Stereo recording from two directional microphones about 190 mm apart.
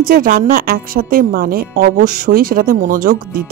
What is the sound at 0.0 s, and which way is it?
A woman's voice, 50° right (ahead or behind).